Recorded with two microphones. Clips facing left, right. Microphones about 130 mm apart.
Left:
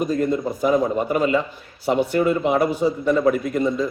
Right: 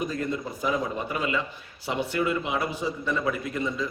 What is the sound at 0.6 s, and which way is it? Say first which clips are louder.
A man's voice: left 9 dB; 45° left (ahead or behind).